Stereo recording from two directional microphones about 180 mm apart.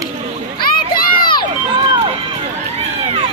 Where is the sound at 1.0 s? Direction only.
55° left (ahead or behind).